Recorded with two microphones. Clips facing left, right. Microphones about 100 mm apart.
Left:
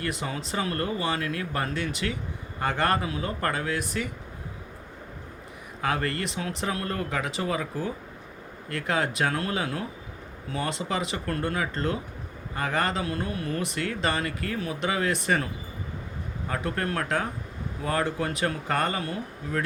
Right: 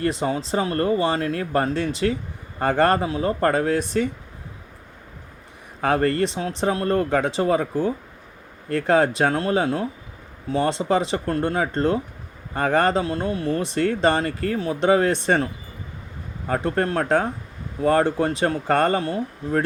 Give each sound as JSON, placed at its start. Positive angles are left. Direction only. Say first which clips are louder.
{"t": 0.0, "sound": "speech", "louder": "right 8 dB", "side_deg": -30}
{"t": 5.8, "sound": "speech", "louder": "right 8 dB", "side_deg": -40}
{"t": 16.5, "sound": "speech", "louder": "right 7 dB", "side_deg": -35}